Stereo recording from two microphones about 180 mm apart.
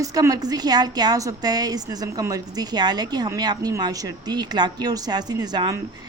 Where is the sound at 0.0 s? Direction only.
20° right (ahead or behind).